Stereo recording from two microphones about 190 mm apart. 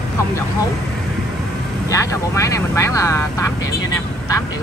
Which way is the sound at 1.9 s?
15° left (ahead or behind).